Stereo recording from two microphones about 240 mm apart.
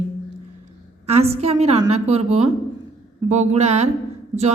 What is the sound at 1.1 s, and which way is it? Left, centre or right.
A woman's voice, right.